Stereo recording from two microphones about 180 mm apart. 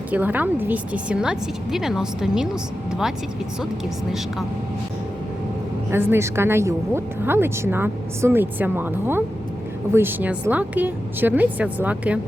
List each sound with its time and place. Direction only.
0.1 s a woman's voice: 10° right (ahead or behind)
5.9 s speech: 10° right (ahead or behind)